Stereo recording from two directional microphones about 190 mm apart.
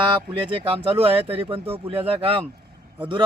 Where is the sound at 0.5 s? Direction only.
30° right (ahead or behind).